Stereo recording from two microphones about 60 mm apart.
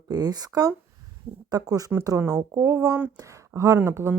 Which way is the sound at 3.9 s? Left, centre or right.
Right.